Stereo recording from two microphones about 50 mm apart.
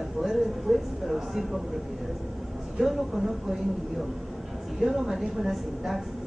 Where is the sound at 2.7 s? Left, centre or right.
Centre.